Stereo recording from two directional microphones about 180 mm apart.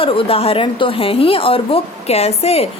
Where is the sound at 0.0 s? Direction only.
30° left (ahead or behind).